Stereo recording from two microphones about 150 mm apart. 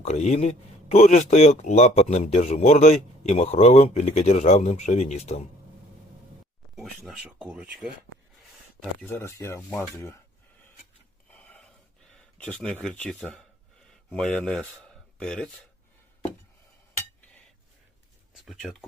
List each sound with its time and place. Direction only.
0.0 s speech: 50° left (ahead or behind)
6.7 s speech: centre (ahead or behind)
9.0 s speech: 15° left (ahead or behind)
11.3 s a sound: 10° left (ahead or behind)
12.4 s speech: 10° left (ahead or behind)
18.4 s speech: 5° left (ahead or behind)